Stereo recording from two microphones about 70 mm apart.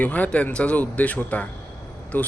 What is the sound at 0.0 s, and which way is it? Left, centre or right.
A man's voice, left.